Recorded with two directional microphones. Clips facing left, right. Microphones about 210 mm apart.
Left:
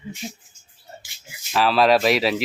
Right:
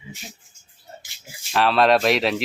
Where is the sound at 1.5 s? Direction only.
Centre (ahead or behind).